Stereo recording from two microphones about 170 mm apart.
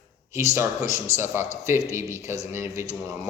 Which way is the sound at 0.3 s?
15° right (ahead or behind).